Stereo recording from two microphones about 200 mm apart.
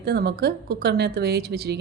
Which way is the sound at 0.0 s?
55° right (ahead or behind).